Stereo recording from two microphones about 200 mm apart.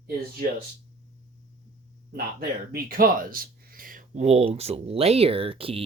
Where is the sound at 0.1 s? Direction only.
45° right (ahead or behind).